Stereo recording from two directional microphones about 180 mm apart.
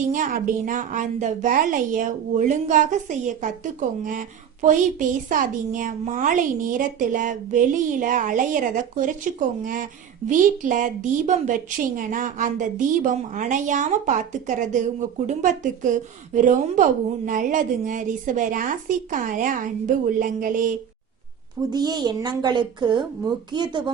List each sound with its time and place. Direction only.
0.1 s a woman's voice: 50° right (ahead or behind)
10.2 s a woman's voice: 45° right (ahead or behind)
21.7 s a woman's voice: 25° right (ahead or behind)